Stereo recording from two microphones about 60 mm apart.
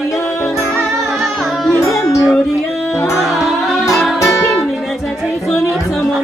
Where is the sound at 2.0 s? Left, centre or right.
Left.